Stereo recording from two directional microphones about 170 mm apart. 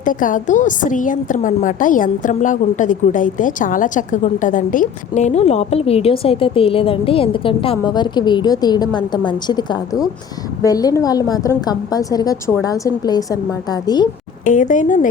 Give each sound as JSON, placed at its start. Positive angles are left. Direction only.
{"t": 0.0, "sound": "a woman's voice", "side_deg": 50}
{"t": 14.4, "sound": "speech", "side_deg": 50}